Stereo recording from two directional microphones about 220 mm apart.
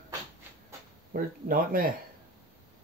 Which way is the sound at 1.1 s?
40° right (ahead or behind).